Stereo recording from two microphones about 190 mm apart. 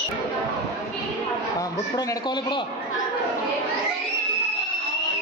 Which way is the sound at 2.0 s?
20° left (ahead or behind).